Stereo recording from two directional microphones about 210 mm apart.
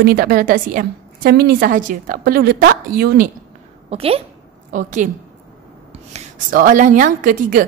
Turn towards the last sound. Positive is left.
turn(degrees=-40)  # may be behind; listen again after turning